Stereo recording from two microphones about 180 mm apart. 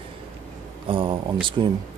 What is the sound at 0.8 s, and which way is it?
Speech, 30° right (ahead or behind).